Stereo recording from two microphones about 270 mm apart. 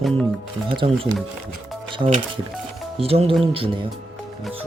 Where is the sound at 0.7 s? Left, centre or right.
Centre.